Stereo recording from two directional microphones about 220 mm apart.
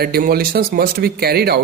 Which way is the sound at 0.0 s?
45° right (ahead or behind).